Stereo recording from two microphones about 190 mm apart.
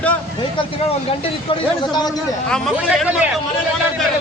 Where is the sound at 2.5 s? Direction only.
5° right (ahead or behind).